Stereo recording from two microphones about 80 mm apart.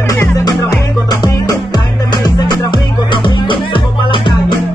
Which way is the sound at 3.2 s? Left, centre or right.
Left.